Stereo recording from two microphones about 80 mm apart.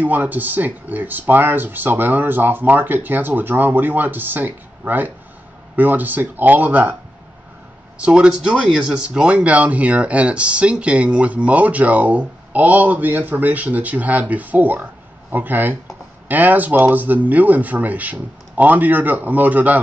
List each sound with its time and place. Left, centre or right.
0.0 s speech: right
8.0 s speech: centre